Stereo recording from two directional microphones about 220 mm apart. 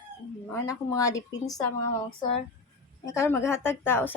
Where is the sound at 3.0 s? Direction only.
10° left (ahead or behind).